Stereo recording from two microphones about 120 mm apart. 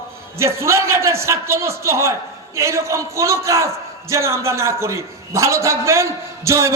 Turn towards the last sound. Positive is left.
turn(degrees=-25)  # may be behind; listen again after turning